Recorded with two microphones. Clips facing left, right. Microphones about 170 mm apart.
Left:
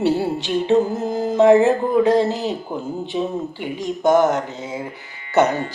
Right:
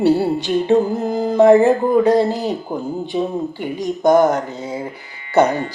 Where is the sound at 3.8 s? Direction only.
15° right (ahead or behind).